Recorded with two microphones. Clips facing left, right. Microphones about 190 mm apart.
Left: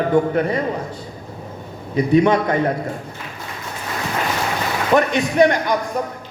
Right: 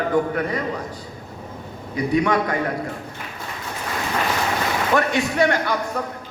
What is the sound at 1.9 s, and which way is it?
Speech, 25° left (ahead or behind).